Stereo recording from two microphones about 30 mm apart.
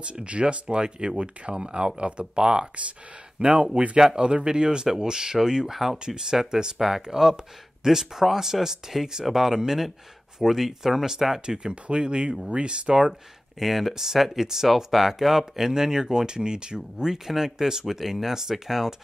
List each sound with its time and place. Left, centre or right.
0.0 s speech: right
3.4 s a man's voice: right
5.7 s speech: centre
11.4 s speech: right
13.6 s speech: centre; by 17.2 s right
17.3 s speech: centre